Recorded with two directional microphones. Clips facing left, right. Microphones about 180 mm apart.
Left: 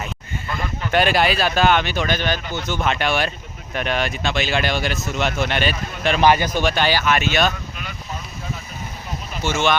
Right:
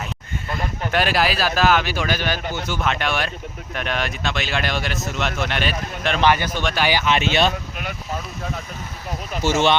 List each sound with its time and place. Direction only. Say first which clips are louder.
0.9 s speech: left 3 dB; centre (ahead or behind)
6.2 s a man's voice: left 3 dB; 15° left (ahead or behind)
6.8 s speech: even; 20° right (ahead or behind)
7.8 s vehicle: right 4 dB; 55° right (ahead or behind)
9.5 s speech: right 2 dB; 35° right (ahead or behind)